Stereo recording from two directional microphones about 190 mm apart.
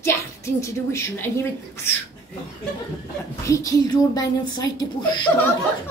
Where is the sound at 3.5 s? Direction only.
20° left (ahead or behind).